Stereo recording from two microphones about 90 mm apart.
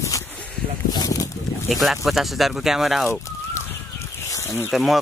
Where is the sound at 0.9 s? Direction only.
40° left (ahead or behind).